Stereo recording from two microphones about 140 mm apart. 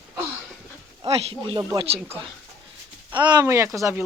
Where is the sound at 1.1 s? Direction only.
45° right (ahead or behind).